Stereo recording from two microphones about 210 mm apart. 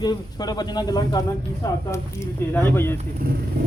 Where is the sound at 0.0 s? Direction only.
20° left (ahead or behind).